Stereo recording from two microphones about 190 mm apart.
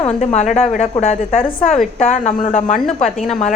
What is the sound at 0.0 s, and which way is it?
A woman's voice, 35° left (ahead or behind).